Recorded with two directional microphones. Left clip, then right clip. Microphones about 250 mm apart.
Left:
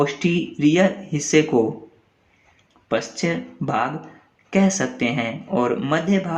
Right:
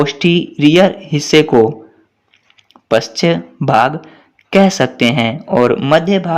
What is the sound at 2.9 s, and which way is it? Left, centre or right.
Speech, right.